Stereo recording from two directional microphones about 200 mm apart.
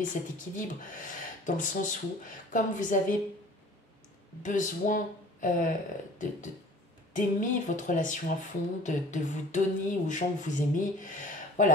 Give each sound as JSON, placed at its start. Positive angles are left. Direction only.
{"t": 0.0, "sound": "speech", "side_deg": 40}
{"t": 4.4, "sound": "speech", "side_deg": 40}